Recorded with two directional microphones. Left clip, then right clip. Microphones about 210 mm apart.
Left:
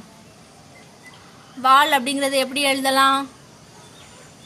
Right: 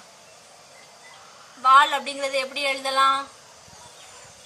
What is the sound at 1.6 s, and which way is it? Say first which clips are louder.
A woman's voice: left 1 dB; 50° left (ahead or behind).